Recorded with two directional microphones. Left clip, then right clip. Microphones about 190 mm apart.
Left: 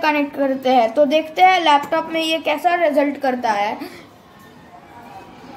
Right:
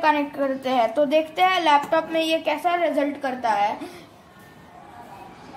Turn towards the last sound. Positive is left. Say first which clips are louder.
# left 2 dB
turn(degrees=0)  # may be behind; listen again after turning